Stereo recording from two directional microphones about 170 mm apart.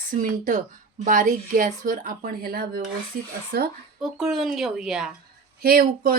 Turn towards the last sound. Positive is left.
turn(degrees=-60)  # may be behind; listen again after turning